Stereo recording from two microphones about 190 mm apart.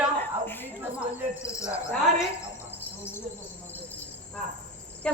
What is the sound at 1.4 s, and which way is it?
Speech, 15° left (ahead or behind).